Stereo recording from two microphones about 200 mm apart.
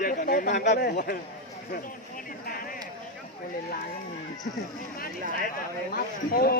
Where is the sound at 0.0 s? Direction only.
45° left (ahead or behind).